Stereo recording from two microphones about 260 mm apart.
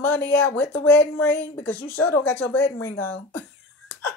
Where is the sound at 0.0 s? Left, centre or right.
Centre.